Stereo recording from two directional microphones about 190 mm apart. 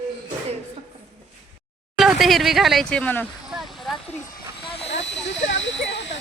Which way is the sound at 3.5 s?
Centre (ahead or behind).